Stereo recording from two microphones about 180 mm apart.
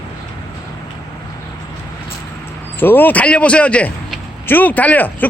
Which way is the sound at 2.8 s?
10° left (ahead or behind).